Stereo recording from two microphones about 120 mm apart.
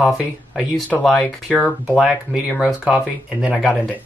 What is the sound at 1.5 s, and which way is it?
Speech, 10° left (ahead or behind).